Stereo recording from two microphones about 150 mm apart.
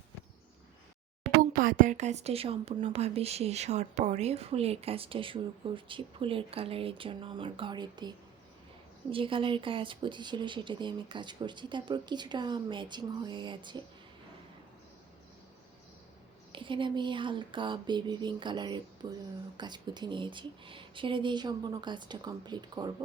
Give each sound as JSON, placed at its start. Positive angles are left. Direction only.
{"t": 1.5, "sound": "speech", "side_deg": -65}
{"t": 16.5, "sound": "speech", "side_deg": -35}